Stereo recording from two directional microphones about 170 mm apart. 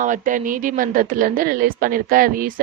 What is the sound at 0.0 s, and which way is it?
A woman's voice, 50° right (ahead or behind).